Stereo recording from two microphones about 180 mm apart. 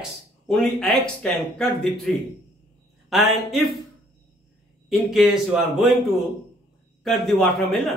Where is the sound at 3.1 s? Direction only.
Centre (ahead or behind).